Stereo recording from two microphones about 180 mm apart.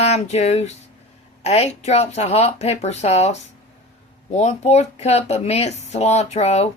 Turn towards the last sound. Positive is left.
turn(degrees=35)  # may be behind; listen again after turning